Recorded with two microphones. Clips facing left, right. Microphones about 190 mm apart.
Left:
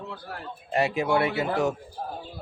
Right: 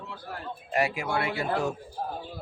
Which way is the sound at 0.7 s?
25° left (ahead or behind).